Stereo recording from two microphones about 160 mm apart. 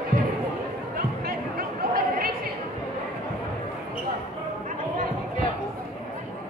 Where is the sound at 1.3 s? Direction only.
65° right (ahead or behind).